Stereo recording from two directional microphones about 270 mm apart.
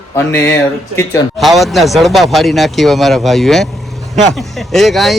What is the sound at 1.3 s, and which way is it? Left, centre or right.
Speech, centre.